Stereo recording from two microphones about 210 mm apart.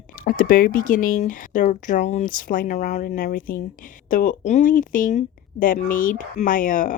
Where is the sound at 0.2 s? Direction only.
45° left (ahead or behind).